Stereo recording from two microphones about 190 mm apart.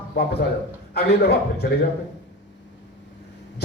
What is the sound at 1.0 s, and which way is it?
Speech, 55° left (ahead or behind).